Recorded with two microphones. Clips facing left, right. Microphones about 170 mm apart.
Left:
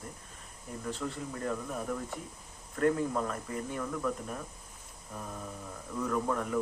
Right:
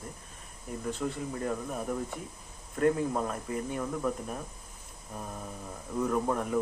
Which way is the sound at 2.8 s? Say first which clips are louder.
Right 2 dB; 15° right (ahead or behind).